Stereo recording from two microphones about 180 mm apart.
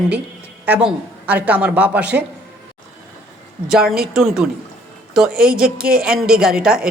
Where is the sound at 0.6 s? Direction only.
5° right (ahead or behind).